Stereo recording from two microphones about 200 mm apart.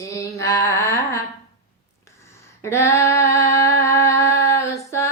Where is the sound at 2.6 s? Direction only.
15° left (ahead or behind).